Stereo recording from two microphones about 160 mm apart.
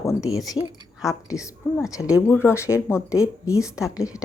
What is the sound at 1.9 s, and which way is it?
Speech, 20° left (ahead or behind).